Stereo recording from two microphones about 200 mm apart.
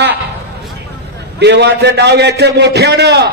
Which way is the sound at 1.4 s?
60° right (ahead or behind).